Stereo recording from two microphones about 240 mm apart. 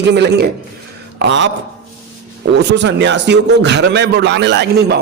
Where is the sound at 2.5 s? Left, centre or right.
Right.